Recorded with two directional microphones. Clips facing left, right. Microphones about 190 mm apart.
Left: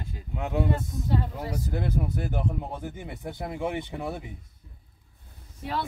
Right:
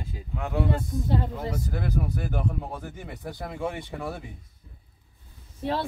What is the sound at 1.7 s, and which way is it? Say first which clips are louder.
Speech: even; 20° left (ahead or behind).